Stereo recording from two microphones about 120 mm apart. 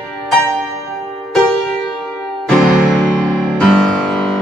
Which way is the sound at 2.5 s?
Centre (ahead or behind).